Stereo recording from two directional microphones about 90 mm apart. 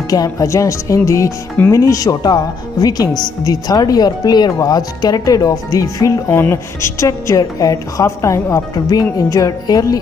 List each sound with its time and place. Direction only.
0.1 s a woman's voice: 40° left (ahead or behind)
6.2 s a woman's voice: 25° left (ahead or behind); by 9.9 s 45° left (ahead or behind)